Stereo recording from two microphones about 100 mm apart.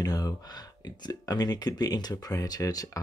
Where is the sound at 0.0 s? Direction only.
40° left (ahead or behind).